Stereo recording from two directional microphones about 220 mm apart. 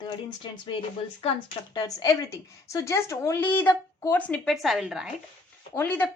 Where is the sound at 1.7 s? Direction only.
20° left (ahead or behind); by 5.1 s 5° right (ahead or behind).